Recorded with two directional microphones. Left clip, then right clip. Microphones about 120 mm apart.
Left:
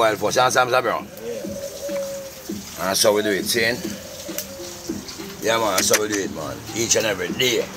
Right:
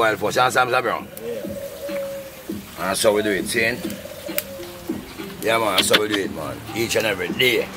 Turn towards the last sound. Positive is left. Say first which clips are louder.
# right 2 dB
turn(degrees=0)  # may be behind; listen again after turning